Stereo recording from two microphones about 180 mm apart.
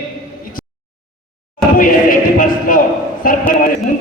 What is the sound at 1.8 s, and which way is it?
A man's voice, 50° left (ahead or behind).